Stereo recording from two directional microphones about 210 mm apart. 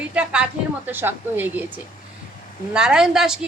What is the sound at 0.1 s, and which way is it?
A woman's voice, 5° right (ahead or behind).